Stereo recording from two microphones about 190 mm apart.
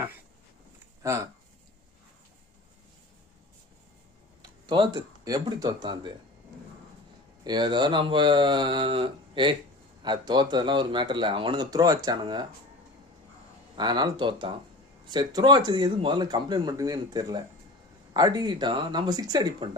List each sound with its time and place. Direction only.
1.0 s speech: 15° right (ahead or behind)
4.4 s speech: 25° right (ahead or behind)
7.4 s speech: 20° right (ahead or behind)
13.7 s speech: 20° right (ahead or behind)